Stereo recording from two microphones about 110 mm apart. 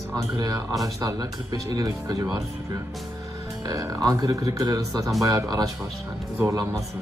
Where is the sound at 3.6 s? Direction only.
30° right (ahead or behind).